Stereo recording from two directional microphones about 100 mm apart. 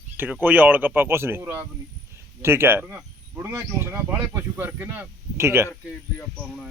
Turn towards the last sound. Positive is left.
turn(degrees=-25)  # may be behind; listen again after turning